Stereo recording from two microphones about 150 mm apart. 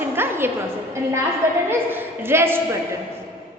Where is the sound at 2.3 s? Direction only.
15° right (ahead or behind).